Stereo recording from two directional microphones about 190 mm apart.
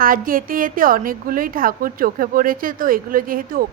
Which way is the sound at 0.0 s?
50° right (ahead or behind).